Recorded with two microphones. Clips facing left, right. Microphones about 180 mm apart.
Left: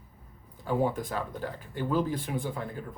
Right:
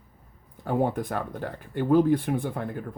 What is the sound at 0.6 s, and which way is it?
Speech, 55° right (ahead or behind).